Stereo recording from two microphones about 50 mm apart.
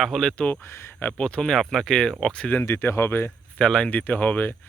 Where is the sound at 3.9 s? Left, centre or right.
Left.